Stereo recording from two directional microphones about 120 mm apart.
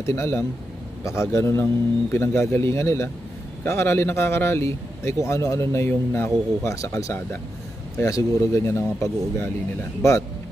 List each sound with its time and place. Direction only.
0.0 s speech: 20° left (ahead or behind)